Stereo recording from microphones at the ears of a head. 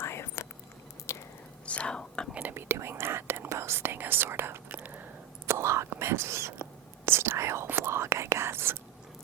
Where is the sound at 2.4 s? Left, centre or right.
Right.